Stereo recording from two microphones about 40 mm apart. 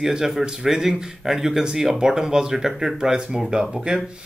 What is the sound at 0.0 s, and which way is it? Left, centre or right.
Speech, centre.